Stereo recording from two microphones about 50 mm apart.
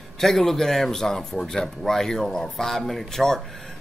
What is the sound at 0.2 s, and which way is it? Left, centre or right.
Speech, centre.